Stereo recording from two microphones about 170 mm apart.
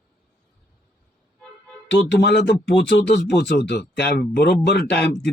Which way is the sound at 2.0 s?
80° left.